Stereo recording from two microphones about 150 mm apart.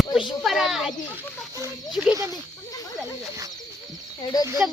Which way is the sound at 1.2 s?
20° right (ahead or behind).